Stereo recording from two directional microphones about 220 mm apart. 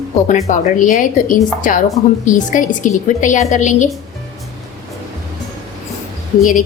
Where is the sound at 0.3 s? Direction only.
35° left (ahead or behind).